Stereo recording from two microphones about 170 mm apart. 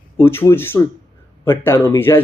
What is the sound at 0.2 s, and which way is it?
Speech, 15° left (ahead or behind).